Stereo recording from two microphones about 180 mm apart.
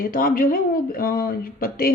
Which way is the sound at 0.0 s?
50° left (ahead or behind).